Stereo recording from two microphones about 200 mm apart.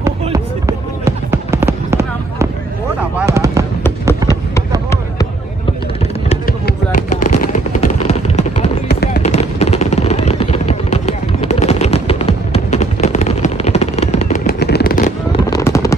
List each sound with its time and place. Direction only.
0.0 s fireworks: 15° right (ahead or behind)
6.2 s a sound: 45° left (ahead or behind)
8.8 s fireworks: 55° left (ahead or behind)
9.2 s a sound: 35° left (ahead or behind)
14.4 s machine gun: 55° left (ahead or behind)
15.5 s fireworks: 15° left (ahead or behind)